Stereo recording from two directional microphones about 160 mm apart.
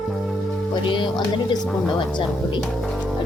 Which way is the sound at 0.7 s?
30° left (ahead or behind).